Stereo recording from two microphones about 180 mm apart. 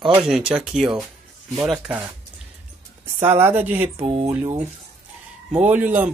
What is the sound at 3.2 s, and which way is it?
Speech, 10° right (ahead or behind).